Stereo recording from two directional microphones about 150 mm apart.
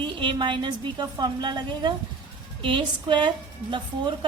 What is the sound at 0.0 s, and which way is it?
A woman's voice, 30° right (ahead or behind).